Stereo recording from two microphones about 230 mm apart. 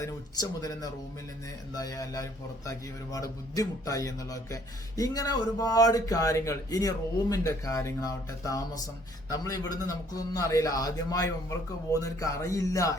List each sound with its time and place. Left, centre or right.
0.0 s speech: centre